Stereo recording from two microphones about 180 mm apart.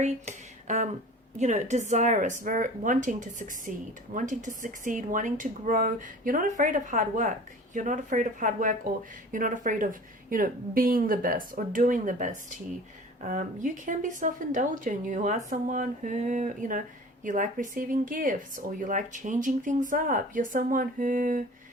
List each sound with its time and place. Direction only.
0.0 s a woman's voice: 40° right (ahead or behind)